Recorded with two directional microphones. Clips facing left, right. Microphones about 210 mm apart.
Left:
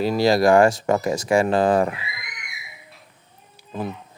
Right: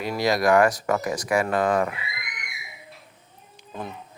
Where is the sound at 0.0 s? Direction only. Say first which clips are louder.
Left 5 dB; 30° left (ahead or behind).